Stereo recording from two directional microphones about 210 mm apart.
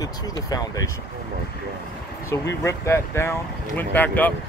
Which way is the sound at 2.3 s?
15° left (ahead or behind).